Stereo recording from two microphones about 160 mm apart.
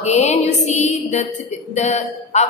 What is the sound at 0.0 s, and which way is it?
A woman's voice, 45° left (ahead or behind).